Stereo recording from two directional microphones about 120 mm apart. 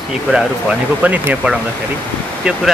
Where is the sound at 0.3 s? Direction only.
5° right (ahead or behind).